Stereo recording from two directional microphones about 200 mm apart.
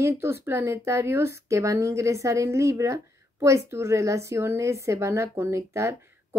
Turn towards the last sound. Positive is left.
turn(degrees=-15)  # may be behind; listen again after turning